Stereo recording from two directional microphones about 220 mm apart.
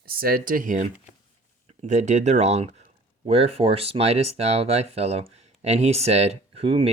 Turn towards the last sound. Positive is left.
turn(degrees=-25)  # may be behind; listen again after turning